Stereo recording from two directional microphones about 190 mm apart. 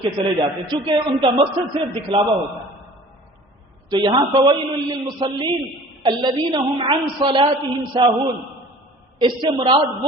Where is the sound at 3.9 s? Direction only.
25° right (ahead or behind).